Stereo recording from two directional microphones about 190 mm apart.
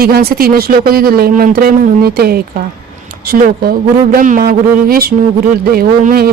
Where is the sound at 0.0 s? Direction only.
55° right (ahead or behind).